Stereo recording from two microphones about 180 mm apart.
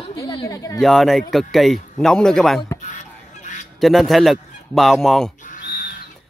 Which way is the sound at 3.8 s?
Centre (ahead or behind).